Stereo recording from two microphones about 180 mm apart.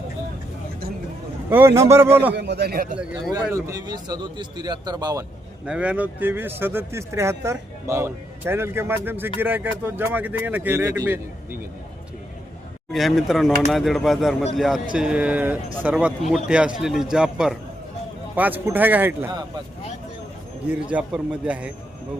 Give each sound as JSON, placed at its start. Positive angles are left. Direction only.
{"t": 1.5, "sound": "speech", "side_deg": -10}
{"t": 2.3, "sound": "speech", "side_deg": -70}
{"t": 2.9, "sound": "speech", "side_deg": 0}
{"t": 3.5, "sound": "speech", "side_deg": -20}
{"t": 5.6, "sound": "speech", "side_deg": -5}
{"t": 12.9, "sound": "speech", "side_deg": 0}
{"t": 20.9, "sound": "speech", "side_deg": -5}